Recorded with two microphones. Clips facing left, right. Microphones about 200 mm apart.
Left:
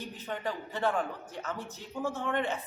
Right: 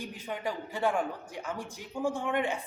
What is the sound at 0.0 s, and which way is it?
Speech, 10° right (ahead or behind).